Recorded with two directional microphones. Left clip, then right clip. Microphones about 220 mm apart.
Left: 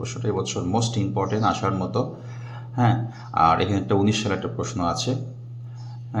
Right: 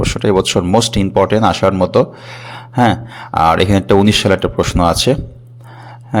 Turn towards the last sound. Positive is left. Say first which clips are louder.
# right 13 dB
turn(degrees=-50)  # may be behind; listen again after turning